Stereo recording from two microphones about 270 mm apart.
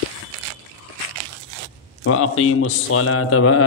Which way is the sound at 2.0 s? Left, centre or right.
Left.